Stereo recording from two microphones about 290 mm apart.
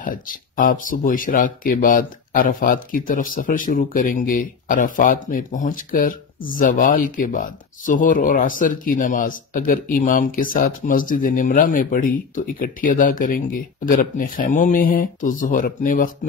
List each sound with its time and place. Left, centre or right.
0.0 s speech: left